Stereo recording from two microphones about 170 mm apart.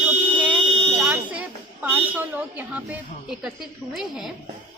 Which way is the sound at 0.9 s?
10° right (ahead or behind).